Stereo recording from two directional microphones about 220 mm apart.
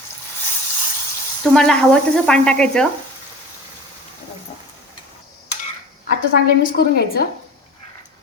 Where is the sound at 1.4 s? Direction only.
Centre (ahead or behind).